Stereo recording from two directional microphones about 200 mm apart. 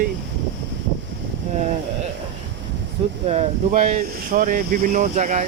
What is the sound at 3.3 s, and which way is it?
Speech, 30° right (ahead or behind).